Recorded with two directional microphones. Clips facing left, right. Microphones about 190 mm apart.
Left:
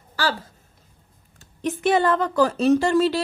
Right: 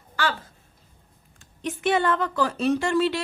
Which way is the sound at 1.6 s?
40° left (ahead or behind).